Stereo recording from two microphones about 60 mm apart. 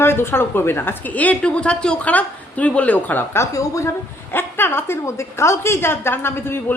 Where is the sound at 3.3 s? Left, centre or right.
Left.